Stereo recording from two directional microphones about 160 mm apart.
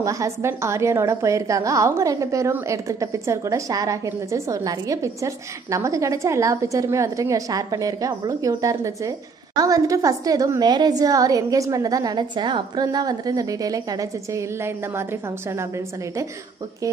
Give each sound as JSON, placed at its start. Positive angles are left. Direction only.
{"t": 0.0, "sound": "a woman's voice", "side_deg": -20}